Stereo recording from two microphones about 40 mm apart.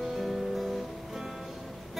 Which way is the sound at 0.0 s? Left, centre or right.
Centre.